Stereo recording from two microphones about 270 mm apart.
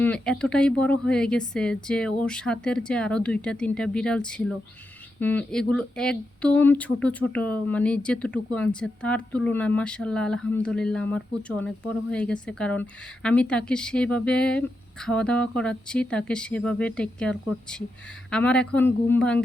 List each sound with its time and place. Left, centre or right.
0.0 s speech: centre